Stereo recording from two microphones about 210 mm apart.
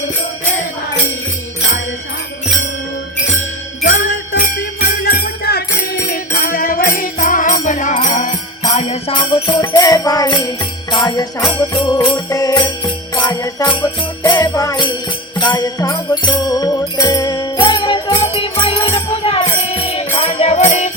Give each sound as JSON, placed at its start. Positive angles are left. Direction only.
{"t": 5.0, "sound": "jingle bell", "side_deg": 45}
{"t": 6.1, "sound": "music", "side_deg": 45}
{"t": 14.3, "sound": "jingle bell", "side_deg": 15}
{"t": 15.4, "sound": "music", "side_deg": 20}